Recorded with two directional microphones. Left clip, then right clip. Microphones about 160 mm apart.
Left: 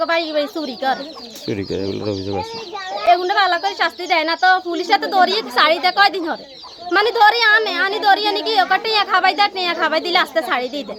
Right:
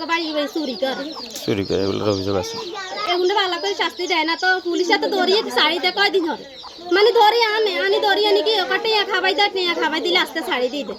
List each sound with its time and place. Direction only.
0.0 s a child's voice: 25° left (ahead or behind)
1.5 s speech: 5° left (ahead or behind)
3.1 s a child's voice: 25° left (ahead or behind)